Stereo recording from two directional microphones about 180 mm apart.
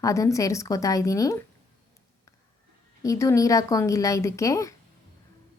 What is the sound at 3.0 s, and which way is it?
Speech, 15° left (ahead or behind).